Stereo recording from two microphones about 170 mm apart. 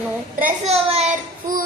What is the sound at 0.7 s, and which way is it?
Speech, 35° right (ahead or behind).